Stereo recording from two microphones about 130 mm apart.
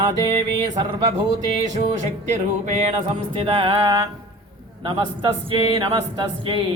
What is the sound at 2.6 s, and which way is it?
Mantra, 65° right (ahead or behind).